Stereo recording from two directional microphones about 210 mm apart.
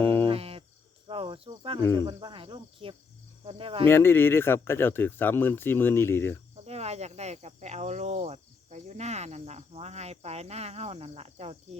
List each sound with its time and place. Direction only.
0.0 s cricket: 10° left (ahead or behind)
0.3 s cricket: 25° right (ahead or behind)
1.8 s speech: 15° left (ahead or behind)
2.0 s cricket: 25° right (ahead or behind)
3.8 s speech: 10° left (ahead or behind)
6.7 s cricket: 30° right (ahead or behind)